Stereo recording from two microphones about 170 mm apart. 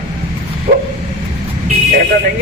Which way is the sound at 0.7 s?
60° right (ahead or behind).